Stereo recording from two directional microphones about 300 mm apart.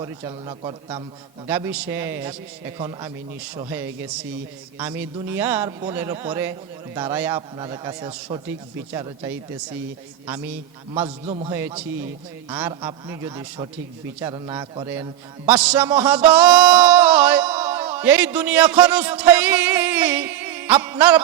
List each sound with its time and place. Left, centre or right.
0.0 s a man's voice: centre
10.9 s a man's voice: centre